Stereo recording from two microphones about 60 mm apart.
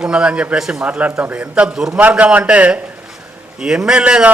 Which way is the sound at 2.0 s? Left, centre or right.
Right.